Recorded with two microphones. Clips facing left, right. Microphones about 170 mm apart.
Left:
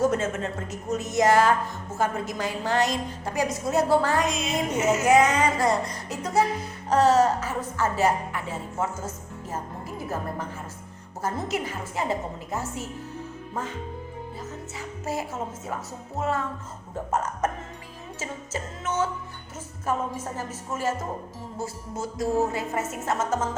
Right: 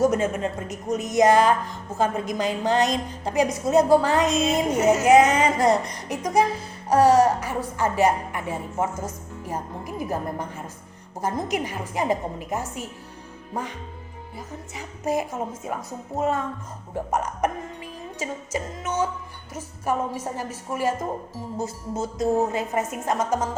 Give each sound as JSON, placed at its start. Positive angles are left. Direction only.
{"t": 0.0, "sound": "speech", "side_deg": -15}